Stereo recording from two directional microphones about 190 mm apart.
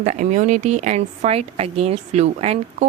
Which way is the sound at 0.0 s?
40° right (ahead or behind).